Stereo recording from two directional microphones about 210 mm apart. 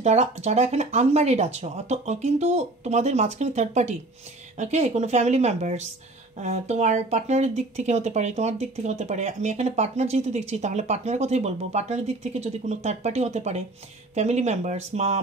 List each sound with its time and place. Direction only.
0.0 s speech: 30° right (ahead or behind)